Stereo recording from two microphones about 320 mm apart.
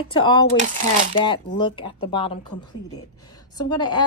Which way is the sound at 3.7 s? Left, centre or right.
Centre.